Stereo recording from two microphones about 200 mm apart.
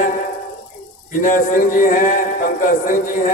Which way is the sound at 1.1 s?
40° left (ahead or behind).